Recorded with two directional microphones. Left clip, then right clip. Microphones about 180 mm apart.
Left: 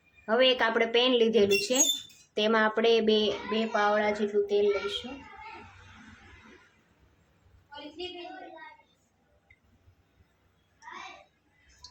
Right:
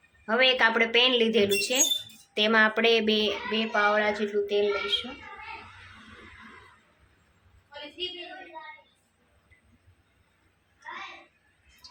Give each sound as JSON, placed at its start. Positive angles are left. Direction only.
{"t": 0.3, "sound": "a child's voice", "side_deg": 15}